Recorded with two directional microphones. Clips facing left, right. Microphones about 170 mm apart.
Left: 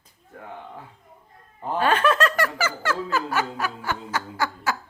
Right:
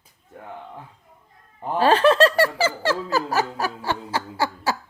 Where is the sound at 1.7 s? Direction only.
35° right (ahead or behind).